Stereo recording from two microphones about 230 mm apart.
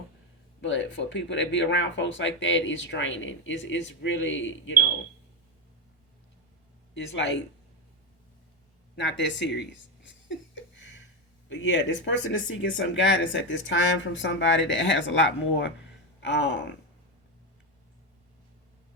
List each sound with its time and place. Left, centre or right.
0.6 s speech: left
6.9 s speech: left
9.0 s a sound: left
11.4 s speech: left